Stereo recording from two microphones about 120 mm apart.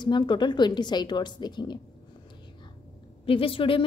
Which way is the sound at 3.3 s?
50° left (ahead or behind).